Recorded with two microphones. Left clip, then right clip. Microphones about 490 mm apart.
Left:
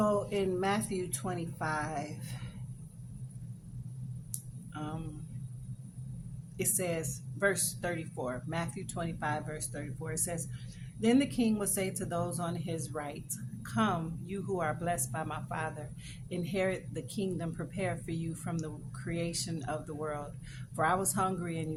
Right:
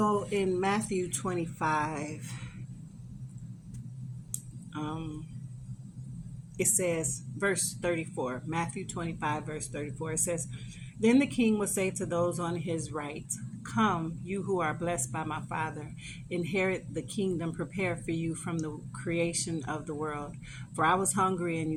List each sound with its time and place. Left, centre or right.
0.0 s speech: left
4.7 s mantra: left
6.6 s a woman's voice: left